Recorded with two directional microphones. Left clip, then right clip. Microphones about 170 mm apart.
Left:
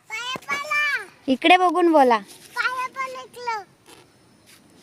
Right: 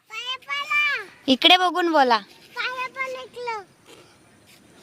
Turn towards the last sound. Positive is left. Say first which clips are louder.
# left 2 dB
turn(degrees=15)  # may be behind; listen again after turning